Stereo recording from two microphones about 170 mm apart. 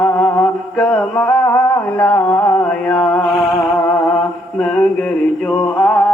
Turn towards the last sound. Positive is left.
turn(degrees=5)  # may be behind; listen again after turning